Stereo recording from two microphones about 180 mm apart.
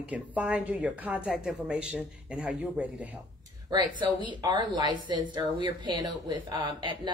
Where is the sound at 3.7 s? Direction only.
25° right (ahead or behind).